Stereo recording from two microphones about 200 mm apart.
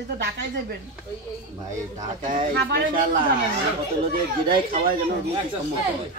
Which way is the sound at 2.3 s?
45° right (ahead or behind).